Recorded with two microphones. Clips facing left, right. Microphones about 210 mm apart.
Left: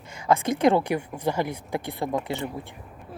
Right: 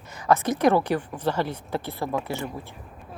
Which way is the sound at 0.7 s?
15° left (ahead or behind).